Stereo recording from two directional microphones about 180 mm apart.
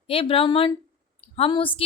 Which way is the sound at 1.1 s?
30° left (ahead or behind).